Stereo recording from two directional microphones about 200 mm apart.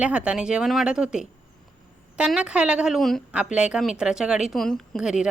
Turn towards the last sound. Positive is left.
turn(degrees=-5)  # may be behind; listen again after turning